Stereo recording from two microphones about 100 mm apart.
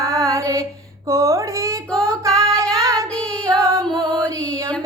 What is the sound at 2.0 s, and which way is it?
Female singing, 30° right (ahead or behind).